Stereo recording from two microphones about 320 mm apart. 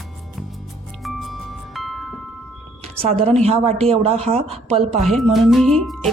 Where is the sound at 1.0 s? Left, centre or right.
Centre.